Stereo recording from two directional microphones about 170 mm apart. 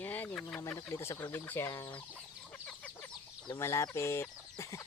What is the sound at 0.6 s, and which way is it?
Speech, 15° left (ahead or behind).